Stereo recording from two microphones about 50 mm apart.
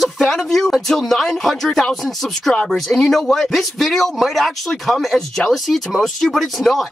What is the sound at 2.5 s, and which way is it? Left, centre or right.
Speech, centre.